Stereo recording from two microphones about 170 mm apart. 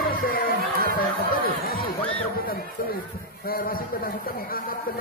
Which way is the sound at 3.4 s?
60° left (ahead or behind).